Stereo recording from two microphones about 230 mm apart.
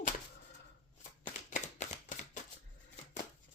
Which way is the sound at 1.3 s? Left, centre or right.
Left.